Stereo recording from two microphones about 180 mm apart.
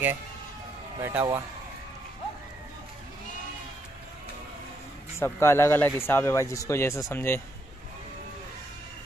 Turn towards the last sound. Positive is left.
turn(degrees=15)  # may be behind; listen again after turning